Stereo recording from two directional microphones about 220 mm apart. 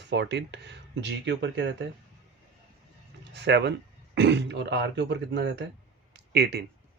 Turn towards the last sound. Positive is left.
turn(degrees=-45)  # may be behind; listen again after turning